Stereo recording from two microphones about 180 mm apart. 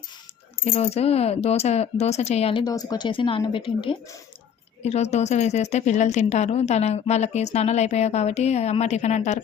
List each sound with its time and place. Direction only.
0.6 s a woman's voice: 35° left (ahead or behind)